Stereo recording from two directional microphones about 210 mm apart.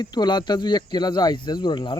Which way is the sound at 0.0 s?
20° left (ahead or behind).